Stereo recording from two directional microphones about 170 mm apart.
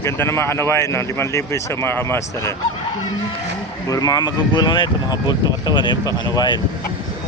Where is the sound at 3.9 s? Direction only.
20° left (ahead or behind).